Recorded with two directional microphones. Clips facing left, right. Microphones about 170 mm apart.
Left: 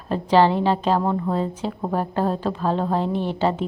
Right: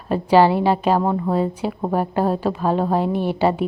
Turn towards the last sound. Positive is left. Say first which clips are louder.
# right 3 dB
turn(degrees=-10)  # may be behind; listen again after turning